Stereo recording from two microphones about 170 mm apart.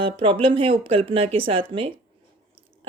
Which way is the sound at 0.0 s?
30° right (ahead or behind).